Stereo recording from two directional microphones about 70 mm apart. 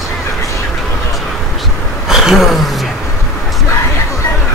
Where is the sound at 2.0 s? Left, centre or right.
Centre.